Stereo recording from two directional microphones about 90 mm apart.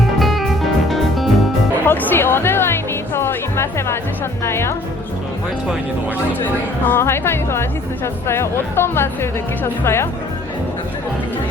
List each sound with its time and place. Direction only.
0.2 s music: centre (ahead or behind)
1.9 s music: 20° left (ahead or behind)
6.4 s speech: 25° left (ahead or behind)